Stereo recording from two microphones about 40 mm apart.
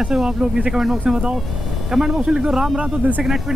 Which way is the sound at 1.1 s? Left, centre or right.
Centre.